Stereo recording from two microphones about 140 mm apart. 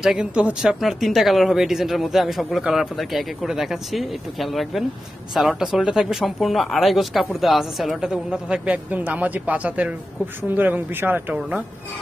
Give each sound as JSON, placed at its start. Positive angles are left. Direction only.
{"t": 0.0, "sound": "speech", "side_deg": -5}